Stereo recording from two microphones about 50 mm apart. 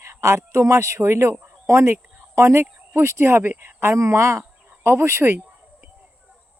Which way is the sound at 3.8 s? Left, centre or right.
Right.